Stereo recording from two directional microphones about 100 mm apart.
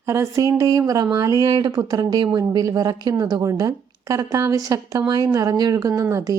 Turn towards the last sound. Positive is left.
turn(degrees=-35)  # may be behind; listen again after turning